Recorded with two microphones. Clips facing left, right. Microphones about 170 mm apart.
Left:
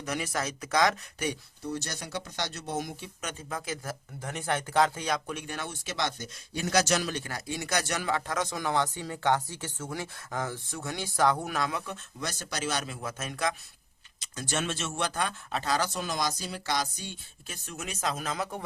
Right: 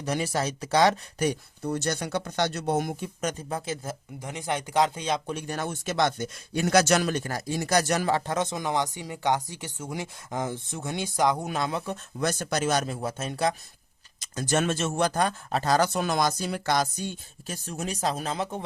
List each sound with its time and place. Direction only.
0.0 s speech: 30° right (ahead or behind)
4.2 s speech: 15° right (ahead or behind)
5.3 s speech: 40° right (ahead or behind)
12.2 s speech: 55° right (ahead or behind); by 13.6 s 30° right (ahead or behind)
14.2 s speech: 45° right (ahead or behind); by 18.6 s 30° right (ahead or behind)